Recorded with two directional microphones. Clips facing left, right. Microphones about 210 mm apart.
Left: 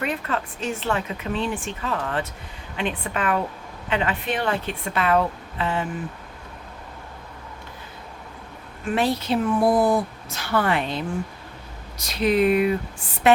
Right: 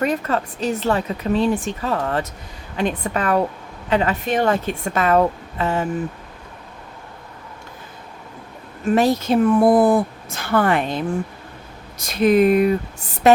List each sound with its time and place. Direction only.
0.0 s a woman's voice: 40° right (ahead or behind)
8.8 s a woman's voice: 45° right (ahead or behind)